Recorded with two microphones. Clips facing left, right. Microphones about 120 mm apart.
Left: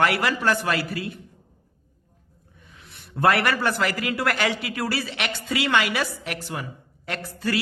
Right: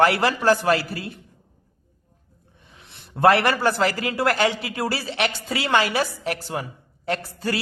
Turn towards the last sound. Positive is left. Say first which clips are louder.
# right 2 dB
turn(degrees=-30)  # may be behind; listen again after turning